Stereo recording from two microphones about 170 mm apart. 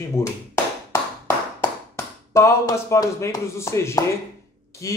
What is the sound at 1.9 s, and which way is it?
Speech, 15° left (ahead or behind).